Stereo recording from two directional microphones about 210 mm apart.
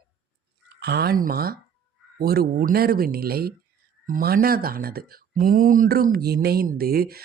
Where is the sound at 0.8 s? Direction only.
50° right (ahead or behind).